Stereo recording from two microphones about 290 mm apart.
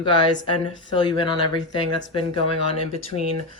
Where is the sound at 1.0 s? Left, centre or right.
Centre.